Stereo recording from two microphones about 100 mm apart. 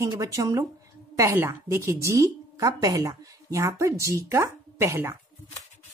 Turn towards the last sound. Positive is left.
turn(degrees=-25)  # may be behind; listen again after turning